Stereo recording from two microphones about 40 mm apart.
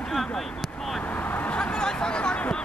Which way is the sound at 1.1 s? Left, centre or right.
Left.